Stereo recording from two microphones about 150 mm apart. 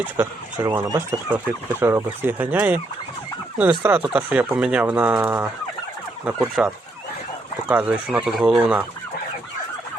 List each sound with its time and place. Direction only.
0.0 s speech: 15° right (ahead or behind)